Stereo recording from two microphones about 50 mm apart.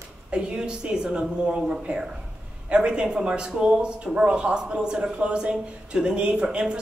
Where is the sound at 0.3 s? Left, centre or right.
Right.